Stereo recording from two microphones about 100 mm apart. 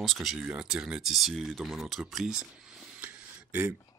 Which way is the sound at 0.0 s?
Centre (ahead or behind).